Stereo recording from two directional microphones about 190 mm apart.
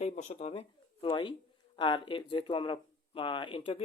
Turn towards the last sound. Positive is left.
turn(degrees=30)  # may be behind; listen again after turning